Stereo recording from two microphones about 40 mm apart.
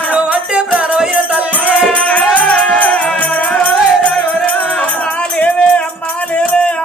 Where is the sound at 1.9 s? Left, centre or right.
Left.